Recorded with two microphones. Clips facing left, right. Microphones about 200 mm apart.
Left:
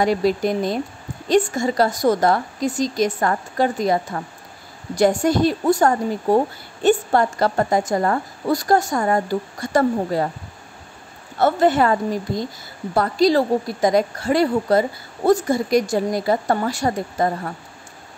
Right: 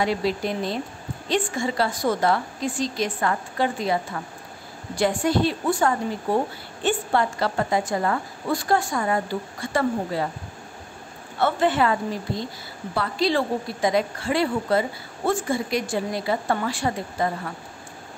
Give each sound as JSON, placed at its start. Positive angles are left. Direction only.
{"t": 0.0, "sound": "a woman's voice", "side_deg": 45}
{"t": 11.3, "sound": "a woman's voice", "side_deg": 40}